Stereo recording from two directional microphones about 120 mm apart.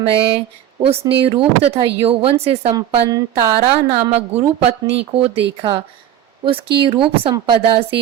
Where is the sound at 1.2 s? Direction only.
55° right (ahead or behind).